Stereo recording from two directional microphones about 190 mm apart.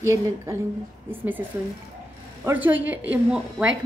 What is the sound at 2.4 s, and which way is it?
A woman's voice, 10° right (ahead or behind).